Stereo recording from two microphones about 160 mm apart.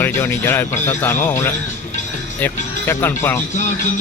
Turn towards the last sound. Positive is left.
turn(degrees=15)  # may be behind; listen again after turning